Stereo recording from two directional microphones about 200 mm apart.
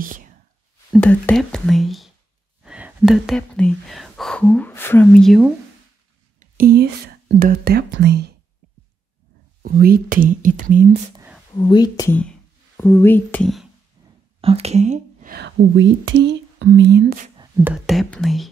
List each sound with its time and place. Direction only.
0.9 s speech: 5° left (ahead or behind)
6.4 s speech: 45° right (ahead or behind)
9.6 s speech: 45° right (ahead or behind)
11.5 s speech: 20° left (ahead or behind); by 13.7 s centre (ahead or behind)
14.0 s a sound: 20° right (ahead or behind)
14.4 s speech: 30° right (ahead or behind); by 17.3 s 50° right (ahead or behind)
17.6 s speech: centre (ahead or behind)